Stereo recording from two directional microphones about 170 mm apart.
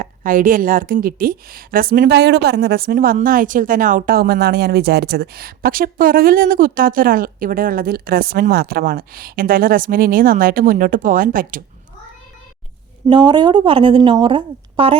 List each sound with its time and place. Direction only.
0.0 s a woman's voice: 55° right (ahead or behind)
13.1 s a woman's voice: 25° right (ahead or behind)